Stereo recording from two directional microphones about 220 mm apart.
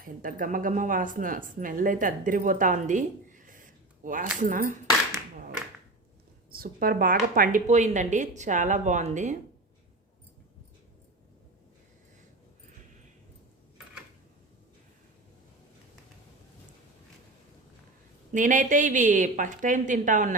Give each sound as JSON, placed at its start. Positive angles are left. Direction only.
{"t": 0.0, "sound": "speech", "side_deg": -40}
{"t": 6.5, "sound": "speech", "side_deg": -40}
{"t": 18.3, "sound": "speech", "side_deg": -35}